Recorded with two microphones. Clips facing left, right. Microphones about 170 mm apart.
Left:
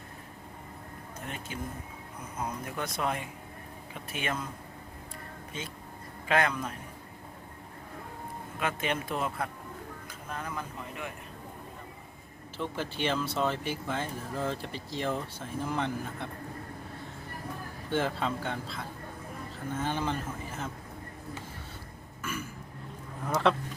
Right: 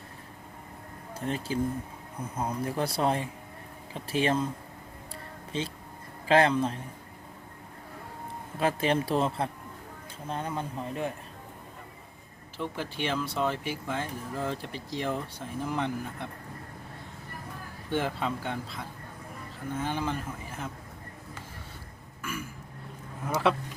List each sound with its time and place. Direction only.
1.2 s speech: 30° right (ahead or behind)
5.5 s speech: 30° right (ahead or behind)
8.5 s speech: 35° right (ahead or behind)
12.5 s speech: 10° right (ahead or behind)
17.9 s speech: 10° right (ahead or behind)
19.8 s speech: 10° right (ahead or behind)
22.2 s burping: 10° right (ahead or behind)
23.3 s speech: 5° right (ahead or behind)